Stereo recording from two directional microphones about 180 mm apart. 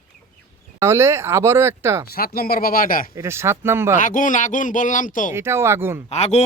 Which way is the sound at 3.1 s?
15° right (ahead or behind).